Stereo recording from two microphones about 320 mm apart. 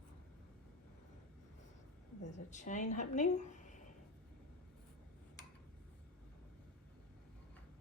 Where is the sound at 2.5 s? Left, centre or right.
Left.